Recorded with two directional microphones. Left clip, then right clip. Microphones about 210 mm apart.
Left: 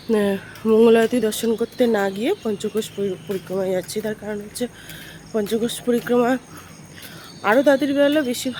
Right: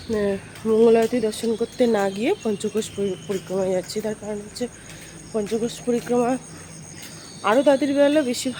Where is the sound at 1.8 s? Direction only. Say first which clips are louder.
Even; 5° left (ahead or behind).